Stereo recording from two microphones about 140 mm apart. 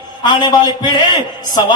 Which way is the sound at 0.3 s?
30° left (ahead or behind).